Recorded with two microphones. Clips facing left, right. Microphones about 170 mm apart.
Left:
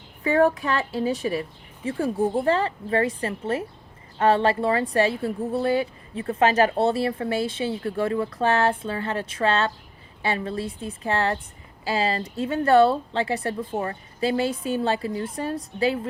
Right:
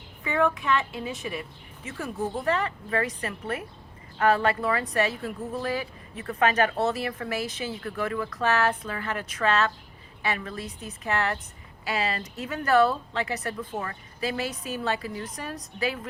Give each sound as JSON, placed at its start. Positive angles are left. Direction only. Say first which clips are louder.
{"t": 0.3, "sound": "a woman's voice", "louder": "left 5 dB", "side_deg": 35}